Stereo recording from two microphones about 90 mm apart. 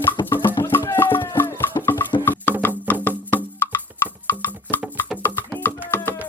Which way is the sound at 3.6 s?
20° left (ahead or behind).